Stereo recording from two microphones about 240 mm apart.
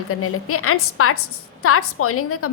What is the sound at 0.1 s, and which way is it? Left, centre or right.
A woman's voice, left.